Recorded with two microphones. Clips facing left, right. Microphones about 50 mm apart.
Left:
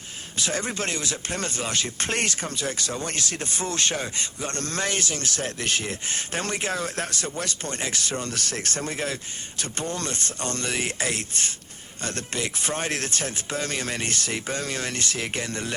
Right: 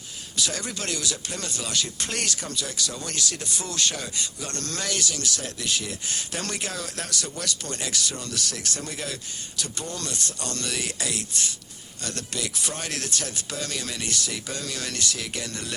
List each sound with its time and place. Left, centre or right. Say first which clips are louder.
0.3 s speech: left 3 dB; left